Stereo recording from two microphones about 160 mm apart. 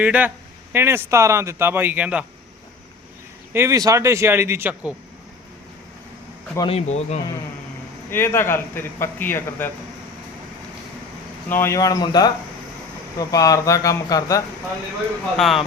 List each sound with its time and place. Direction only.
0.0 s speech: 10° right (ahead or behind)
3.5 s speech: 15° right (ahead or behind)
6.7 s speech: 40° left (ahead or behind)
8.1 s a man's voice: 15° left (ahead or behind)
11.4 s speech: 15° left (ahead or behind)
15.4 s speech: centre (ahead or behind)